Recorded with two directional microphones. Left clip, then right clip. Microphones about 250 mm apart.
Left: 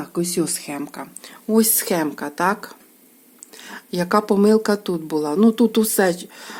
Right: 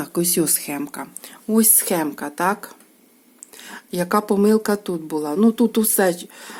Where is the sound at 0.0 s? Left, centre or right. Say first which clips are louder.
Right 2 dB; centre.